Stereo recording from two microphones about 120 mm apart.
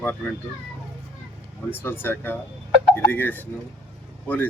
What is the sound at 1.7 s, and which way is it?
Speech, 20° left (ahead or behind).